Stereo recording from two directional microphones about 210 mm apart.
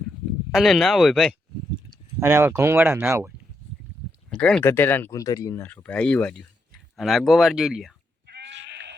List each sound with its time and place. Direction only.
0.5 s speech: centre (ahead or behind)
2.2 s speech: 10° right (ahead or behind)
4.4 s speech: 5° left (ahead or behind)
8.3 s sheep: 55° right (ahead or behind)